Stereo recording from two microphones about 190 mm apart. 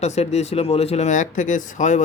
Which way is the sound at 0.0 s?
35° left (ahead or behind).